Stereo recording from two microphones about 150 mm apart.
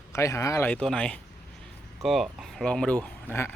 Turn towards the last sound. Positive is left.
turn(degrees=15)  # may be behind; listen again after turning